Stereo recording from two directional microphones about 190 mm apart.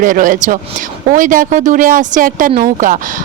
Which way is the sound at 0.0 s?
45° right (ahead or behind).